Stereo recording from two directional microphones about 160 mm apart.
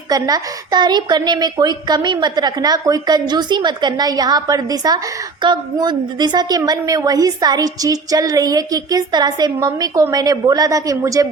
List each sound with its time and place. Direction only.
0.1 s a woman's voice: 25° right (ahead or behind)